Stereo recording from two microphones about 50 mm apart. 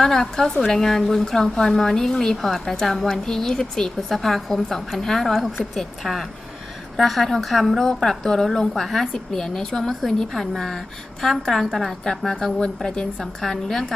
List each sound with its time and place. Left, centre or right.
0.0 s a woman's voice: centre